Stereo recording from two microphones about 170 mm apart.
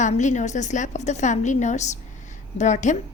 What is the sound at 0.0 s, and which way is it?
A woman's voice, 45° left (ahead or behind).